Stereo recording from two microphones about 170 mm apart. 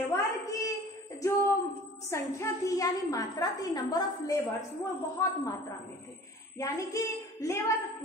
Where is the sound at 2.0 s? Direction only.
15° left (ahead or behind).